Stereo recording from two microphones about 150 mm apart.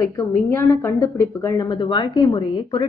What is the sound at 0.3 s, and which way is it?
A woman's voice, 15° left (ahead or behind).